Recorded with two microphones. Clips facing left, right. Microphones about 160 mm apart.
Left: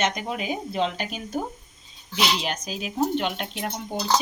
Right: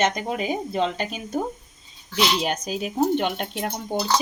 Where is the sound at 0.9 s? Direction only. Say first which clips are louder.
Right 2 dB; 20° right (ahead or behind).